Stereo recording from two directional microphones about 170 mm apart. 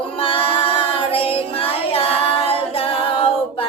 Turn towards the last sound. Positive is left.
turn(degrees=35)  # may be behind; listen again after turning